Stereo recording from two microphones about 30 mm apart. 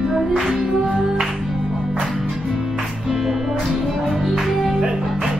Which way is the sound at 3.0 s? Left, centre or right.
Centre.